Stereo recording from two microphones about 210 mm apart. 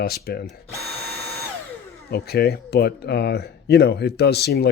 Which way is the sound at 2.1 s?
50° left (ahead or behind).